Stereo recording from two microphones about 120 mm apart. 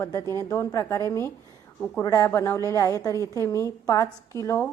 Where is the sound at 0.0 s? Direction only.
25° left (ahead or behind).